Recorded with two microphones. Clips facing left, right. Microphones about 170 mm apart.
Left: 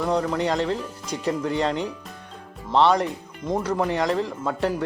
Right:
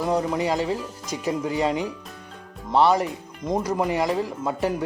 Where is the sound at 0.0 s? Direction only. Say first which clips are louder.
Even; 5° right (ahead or behind).